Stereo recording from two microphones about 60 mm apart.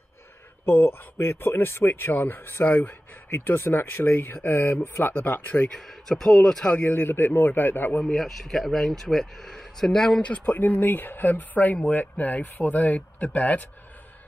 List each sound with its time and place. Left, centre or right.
0.7 s speech: left
3.3 s speech: left
5.7 s speech: centre
6.7 s speech: left
8.0 s speech: centre
10.2 s speech: left